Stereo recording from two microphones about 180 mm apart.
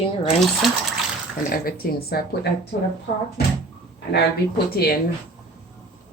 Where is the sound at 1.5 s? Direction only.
55° left (ahead or behind).